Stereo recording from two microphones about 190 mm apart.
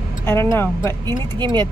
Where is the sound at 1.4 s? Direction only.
25° right (ahead or behind).